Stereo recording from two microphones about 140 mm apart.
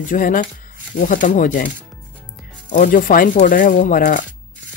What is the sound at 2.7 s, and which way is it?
Speech, 70° left (ahead or behind).